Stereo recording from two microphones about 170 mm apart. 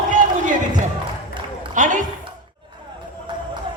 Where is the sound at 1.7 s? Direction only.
50° right (ahead or behind).